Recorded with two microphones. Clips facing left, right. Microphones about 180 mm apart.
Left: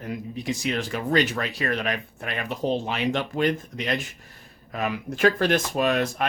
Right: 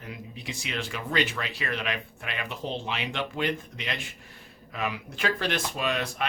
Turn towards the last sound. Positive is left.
turn(degrees=45)  # may be behind; listen again after turning